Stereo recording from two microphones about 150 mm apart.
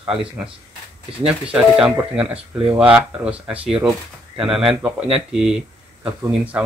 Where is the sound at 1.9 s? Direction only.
10° right (ahead or behind).